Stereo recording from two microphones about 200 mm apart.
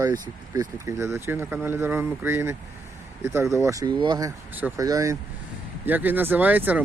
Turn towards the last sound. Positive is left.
turn(degrees=-10)  # may be behind; listen again after turning